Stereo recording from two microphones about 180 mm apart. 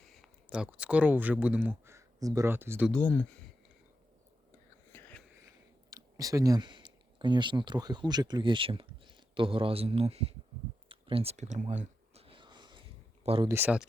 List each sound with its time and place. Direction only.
0.0 s speech: centre (ahead or behind)
2.9 s speech: 10° left (ahead or behind)
4.9 s a sound: 10° left (ahead or behind)
5.9 s speech: 20° right (ahead or behind); by 10.3 s 35° right (ahead or behind)
10.8 s a sound: 30° right (ahead or behind)
13.2 s speech: 30° right (ahead or behind)
13.5 s speech: 10° right (ahead or behind)